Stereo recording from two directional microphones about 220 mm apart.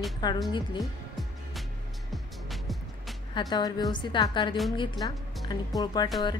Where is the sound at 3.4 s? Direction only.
20° left (ahead or behind).